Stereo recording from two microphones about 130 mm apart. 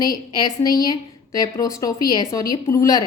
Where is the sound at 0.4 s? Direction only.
30° left (ahead or behind).